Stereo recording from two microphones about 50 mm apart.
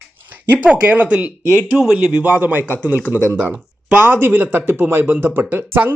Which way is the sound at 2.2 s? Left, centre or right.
Right.